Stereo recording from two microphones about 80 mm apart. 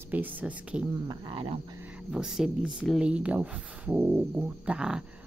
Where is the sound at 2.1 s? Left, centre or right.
Centre.